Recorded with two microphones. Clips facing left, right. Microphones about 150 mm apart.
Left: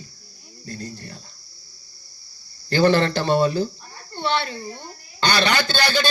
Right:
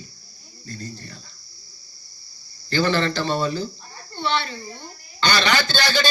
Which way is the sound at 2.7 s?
50° left (ahead or behind).